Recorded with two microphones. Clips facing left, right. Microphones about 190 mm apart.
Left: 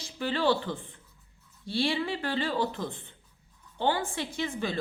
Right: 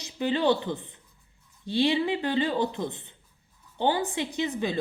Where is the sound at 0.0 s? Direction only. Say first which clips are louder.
Right 3 dB; 20° right (ahead or behind).